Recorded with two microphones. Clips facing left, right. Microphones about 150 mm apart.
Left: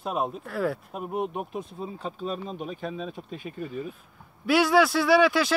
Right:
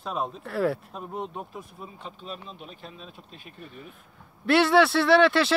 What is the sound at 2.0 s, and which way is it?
Speech, 40° left (ahead or behind).